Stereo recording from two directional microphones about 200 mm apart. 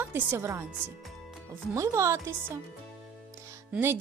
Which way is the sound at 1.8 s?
15° right (ahead or behind).